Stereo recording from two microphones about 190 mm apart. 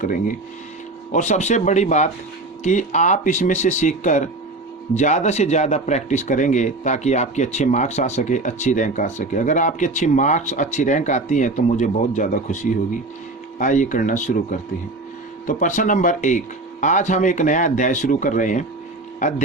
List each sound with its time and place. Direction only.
0.0 s speech: 45° left (ahead or behind)